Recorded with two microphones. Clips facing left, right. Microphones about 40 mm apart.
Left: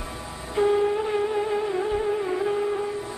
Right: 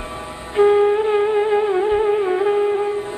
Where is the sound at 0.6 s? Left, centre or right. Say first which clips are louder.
Right 8 dB; right.